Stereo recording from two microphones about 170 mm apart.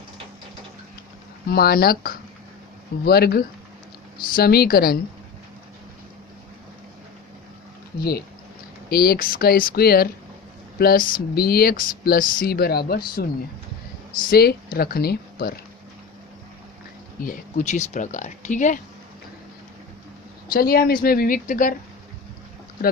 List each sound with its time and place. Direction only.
1.5 s speech: 65° left (ahead or behind)
8.9 s speech: 65° left (ahead or behind)
14.3 s speech: 60° left (ahead or behind)
17.2 s speech: 45° left (ahead or behind)
20.5 s speech: 60° left (ahead or behind)